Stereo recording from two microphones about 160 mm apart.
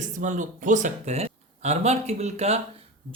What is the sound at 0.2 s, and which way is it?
Speech, 55° right (ahead or behind).